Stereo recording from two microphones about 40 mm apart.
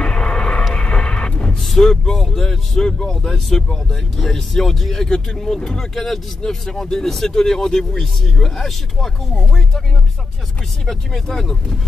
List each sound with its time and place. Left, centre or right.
0.0 s vehicle: left
1.6 s speech: centre
10.9 s speech: centre